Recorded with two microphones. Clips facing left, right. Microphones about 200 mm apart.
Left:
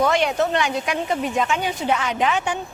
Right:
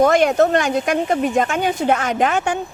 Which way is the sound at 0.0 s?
45° right (ahead or behind).